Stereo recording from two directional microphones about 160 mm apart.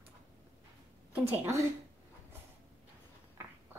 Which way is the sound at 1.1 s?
15° right (ahead or behind).